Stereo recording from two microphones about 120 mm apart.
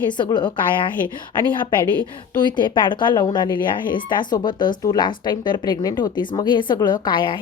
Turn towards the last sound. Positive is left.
turn(degrees=40)  # may be behind; listen again after turning